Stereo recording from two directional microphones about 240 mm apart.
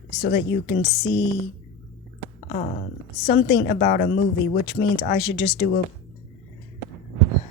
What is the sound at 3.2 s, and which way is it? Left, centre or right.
Speech, left.